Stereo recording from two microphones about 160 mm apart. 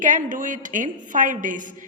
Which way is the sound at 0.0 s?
55° right (ahead or behind).